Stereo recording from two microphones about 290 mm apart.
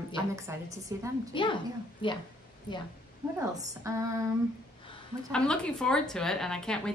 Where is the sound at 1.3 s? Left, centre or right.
Centre.